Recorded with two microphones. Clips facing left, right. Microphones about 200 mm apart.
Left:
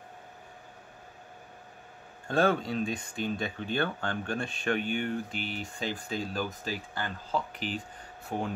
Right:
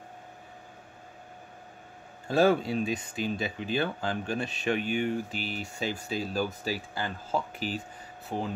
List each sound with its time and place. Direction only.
2.2 s speech: 5° right (ahead or behind)
8.3 s speech: centre (ahead or behind)